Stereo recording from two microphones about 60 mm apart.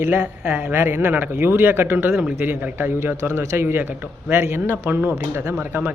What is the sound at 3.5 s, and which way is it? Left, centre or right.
A man's voice, right.